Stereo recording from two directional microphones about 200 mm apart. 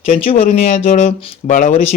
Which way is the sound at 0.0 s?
35° left (ahead or behind).